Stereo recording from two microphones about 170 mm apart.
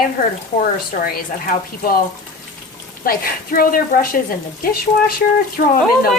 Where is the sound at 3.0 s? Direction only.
55° left (ahead or behind).